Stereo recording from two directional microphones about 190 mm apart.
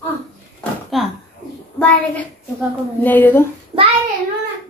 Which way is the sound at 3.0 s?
10° left (ahead or behind).